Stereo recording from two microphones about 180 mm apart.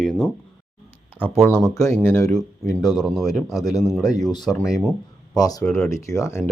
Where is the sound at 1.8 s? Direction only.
15° left (ahead or behind).